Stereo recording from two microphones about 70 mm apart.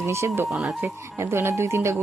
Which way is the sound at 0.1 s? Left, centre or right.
Right.